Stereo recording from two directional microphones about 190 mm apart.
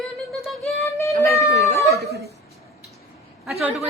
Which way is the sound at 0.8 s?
15° left (ahead or behind).